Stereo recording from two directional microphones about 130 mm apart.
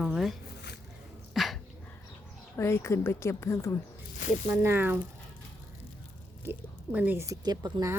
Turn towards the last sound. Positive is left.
turn(degrees=-30)  # may be behind; listen again after turning